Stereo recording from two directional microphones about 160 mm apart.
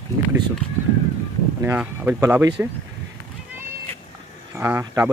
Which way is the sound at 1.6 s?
10° right (ahead or behind).